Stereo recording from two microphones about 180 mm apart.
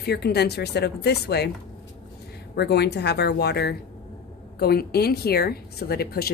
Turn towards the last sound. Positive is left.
turn(degrees=60)  # may be behind; listen again after turning